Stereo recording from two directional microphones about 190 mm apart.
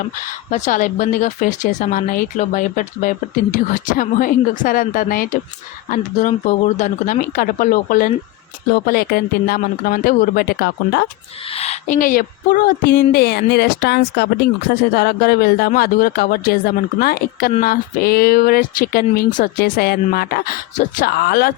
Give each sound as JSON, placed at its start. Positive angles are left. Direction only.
{"t": 0.5, "sound": "speech", "side_deg": 40}
{"t": 11.5, "sound": "speech", "side_deg": 35}